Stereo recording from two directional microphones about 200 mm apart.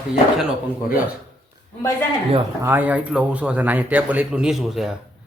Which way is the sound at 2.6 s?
10° right (ahead or behind).